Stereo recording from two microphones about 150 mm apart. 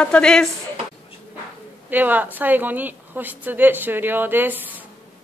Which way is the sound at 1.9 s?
10° right (ahead or behind).